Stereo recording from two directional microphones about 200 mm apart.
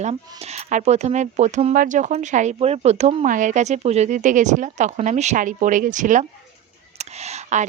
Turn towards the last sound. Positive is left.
turn(degrees=-35)  # may be behind; listen again after turning